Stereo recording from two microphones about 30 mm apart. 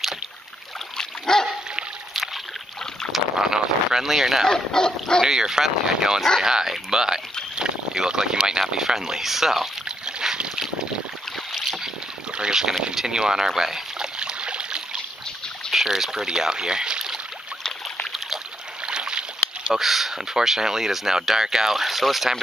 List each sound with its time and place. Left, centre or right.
0.9 s dog: centre
3.1 s boat: centre
4.5 s speech: left
5.2 s speech: centre
9.8 s boat: right
11.5 s boat: centre
12.3 s boat: right
12.9 s speech: right
14.1 s stream: right
15.7 s speech: centre
18.9 s boat: right
19.7 s speech: centre